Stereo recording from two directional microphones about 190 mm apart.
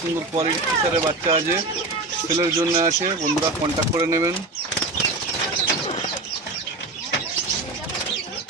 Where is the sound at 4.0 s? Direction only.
15° right (ahead or behind).